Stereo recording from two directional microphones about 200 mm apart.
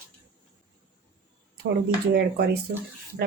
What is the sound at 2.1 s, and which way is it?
Speech, 55° right (ahead or behind).